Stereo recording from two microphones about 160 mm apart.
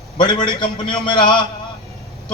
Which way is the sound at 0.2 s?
30° left (ahead or behind).